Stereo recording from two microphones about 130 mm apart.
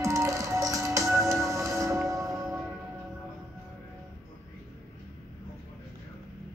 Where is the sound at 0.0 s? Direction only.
25° right (ahead or behind).